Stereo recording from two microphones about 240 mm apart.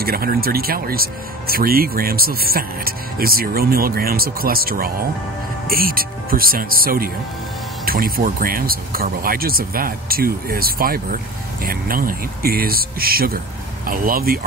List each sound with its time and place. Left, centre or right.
0.0 s speech: right